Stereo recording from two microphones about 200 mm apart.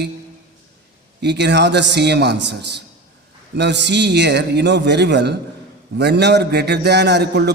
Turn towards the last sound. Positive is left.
turn(degrees=-55)  # may be behind; listen again after turning